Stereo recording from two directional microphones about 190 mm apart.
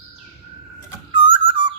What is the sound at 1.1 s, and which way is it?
Whistle, 25° right (ahead or behind).